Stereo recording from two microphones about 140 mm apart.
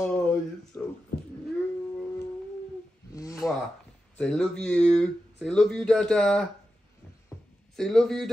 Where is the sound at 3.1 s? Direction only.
25° left (ahead or behind).